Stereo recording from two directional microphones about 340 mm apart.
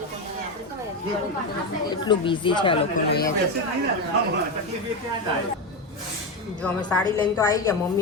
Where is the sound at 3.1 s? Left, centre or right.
Left.